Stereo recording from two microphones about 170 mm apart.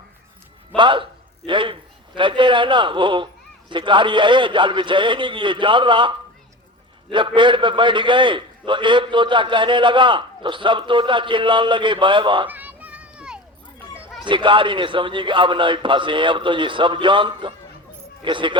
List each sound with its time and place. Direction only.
0.8 s a man's voice: 30° right (ahead or behind)
12.5 s children playing: 10° right (ahead or behind)
14.3 s a man's voice: 30° right (ahead or behind)